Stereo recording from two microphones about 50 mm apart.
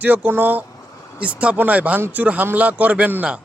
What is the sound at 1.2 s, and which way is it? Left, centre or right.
Speech, right.